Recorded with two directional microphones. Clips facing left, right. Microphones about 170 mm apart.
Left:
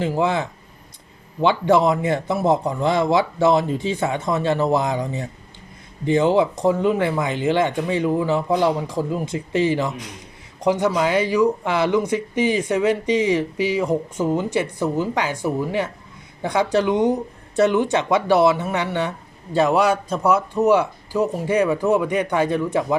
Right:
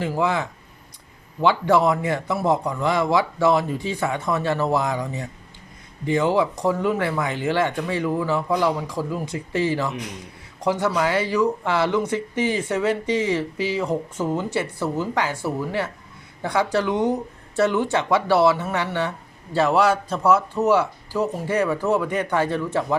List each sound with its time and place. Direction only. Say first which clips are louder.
0.0 s speech: left 2 dB; 25° left (ahead or behind)